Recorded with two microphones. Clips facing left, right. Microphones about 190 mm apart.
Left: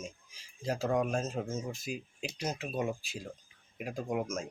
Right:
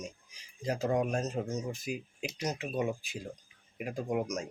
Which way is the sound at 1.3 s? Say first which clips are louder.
Right 1 dB; 15° right (ahead or behind).